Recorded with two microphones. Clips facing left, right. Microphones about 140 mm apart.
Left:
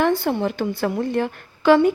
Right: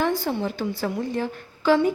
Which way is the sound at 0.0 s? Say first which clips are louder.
Left 4 dB; 65° left (ahead or behind).